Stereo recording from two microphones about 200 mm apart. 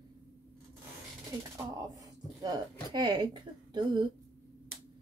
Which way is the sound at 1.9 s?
15° right (ahead or behind).